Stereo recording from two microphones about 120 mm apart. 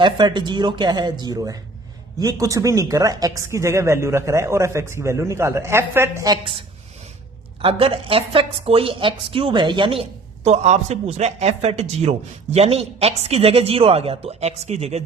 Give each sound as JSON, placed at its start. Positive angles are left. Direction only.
{"t": 0.0, "sound": "speech", "side_deg": -40}
{"t": 6.2, "sound": "speech", "side_deg": -35}
{"t": 7.6, "sound": "a woman's voice", "side_deg": -50}